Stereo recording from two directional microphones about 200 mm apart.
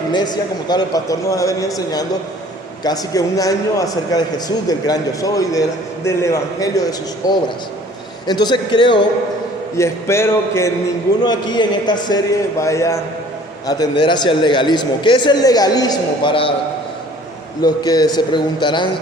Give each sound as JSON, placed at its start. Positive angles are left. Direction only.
{"t": 0.7, "sound": "a man's voice", "side_deg": 20}
{"t": 17.6, "sound": "a man's voice", "side_deg": 20}